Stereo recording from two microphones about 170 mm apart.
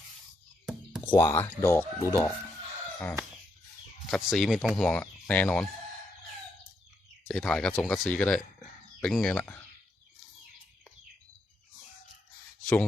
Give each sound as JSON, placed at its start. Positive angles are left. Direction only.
{"t": 0.6, "sound": "music", "side_deg": -5}
{"t": 1.1, "sound": "speech", "side_deg": 20}
{"t": 4.1, "sound": "speech", "side_deg": 0}
{"t": 7.3, "sound": "speech", "side_deg": 5}
{"t": 12.6, "sound": "speech", "side_deg": 10}